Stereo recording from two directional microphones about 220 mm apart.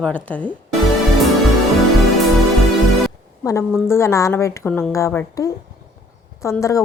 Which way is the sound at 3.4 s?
15° left (ahead or behind).